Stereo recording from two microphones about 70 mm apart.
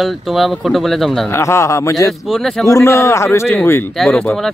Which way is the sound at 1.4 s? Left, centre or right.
Left.